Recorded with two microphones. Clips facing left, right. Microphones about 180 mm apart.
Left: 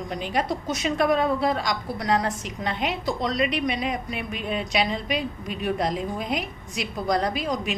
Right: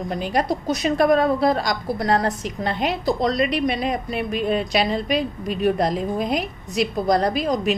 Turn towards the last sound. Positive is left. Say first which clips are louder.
# right 5 dB
turn(degrees=-40)  # may be behind; listen again after turning